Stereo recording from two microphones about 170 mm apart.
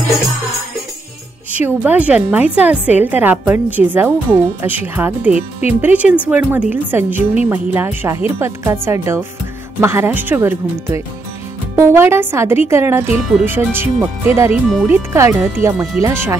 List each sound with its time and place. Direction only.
1.6 s a woman's voice: 10° right (ahead or behind)